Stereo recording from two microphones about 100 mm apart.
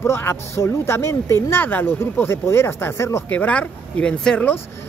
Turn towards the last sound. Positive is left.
turn(degrees=10)  # may be behind; listen again after turning